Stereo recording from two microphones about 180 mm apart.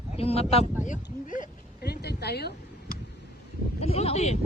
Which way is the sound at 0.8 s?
45° left (ahead or behind).